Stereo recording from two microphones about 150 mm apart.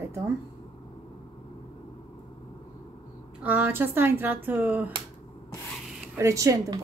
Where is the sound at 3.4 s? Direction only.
10° right (ahead or behind).